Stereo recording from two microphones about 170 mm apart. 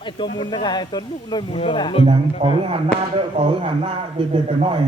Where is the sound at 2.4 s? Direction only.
35° right (ahead or behind).